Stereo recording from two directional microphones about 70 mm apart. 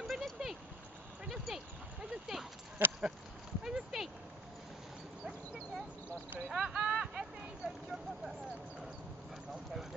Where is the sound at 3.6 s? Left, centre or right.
Centre.